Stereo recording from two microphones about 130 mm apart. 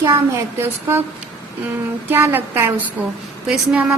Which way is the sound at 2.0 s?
15° right (ahead or behind).